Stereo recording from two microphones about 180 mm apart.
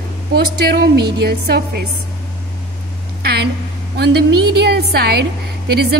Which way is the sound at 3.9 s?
65° right (ahead or behind).